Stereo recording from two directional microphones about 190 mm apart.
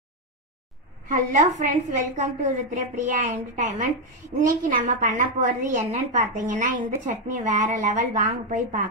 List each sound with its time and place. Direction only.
1.0 s a woman's voice: 45° right (ahead or behind)